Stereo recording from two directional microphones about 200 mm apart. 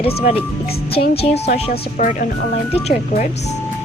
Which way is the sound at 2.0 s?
45° left (ahead or behind).